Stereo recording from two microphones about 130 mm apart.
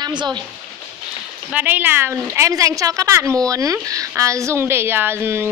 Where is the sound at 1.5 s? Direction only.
15° right (ahead or behind).